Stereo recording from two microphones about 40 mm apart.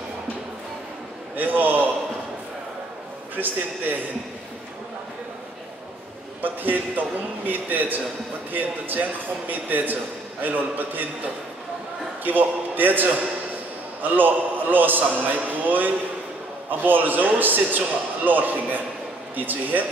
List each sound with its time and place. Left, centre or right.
1.3 s a sound: right
3.3 s a man's voice: right
6.4 s a man's voice: right
12.3 s a man's voice: right